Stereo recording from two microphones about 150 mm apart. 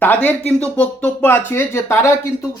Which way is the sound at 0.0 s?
10° left (ahead or behind).